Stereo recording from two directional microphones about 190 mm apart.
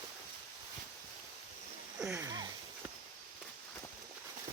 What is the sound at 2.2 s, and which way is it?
Sniff, 20° right (ahead or behind).